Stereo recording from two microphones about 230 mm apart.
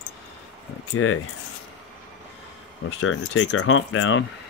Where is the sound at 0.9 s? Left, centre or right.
Left.